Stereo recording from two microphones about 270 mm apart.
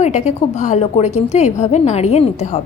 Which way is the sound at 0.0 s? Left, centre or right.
Left.